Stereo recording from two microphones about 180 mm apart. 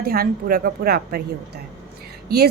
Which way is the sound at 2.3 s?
65° right (ahead or behind).